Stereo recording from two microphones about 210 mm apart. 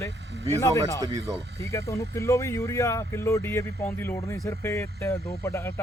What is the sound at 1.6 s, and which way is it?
Speech, 15° left (ahead or behind).